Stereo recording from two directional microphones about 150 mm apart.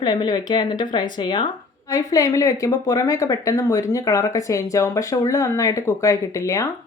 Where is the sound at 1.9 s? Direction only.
20° left (ahead or behind).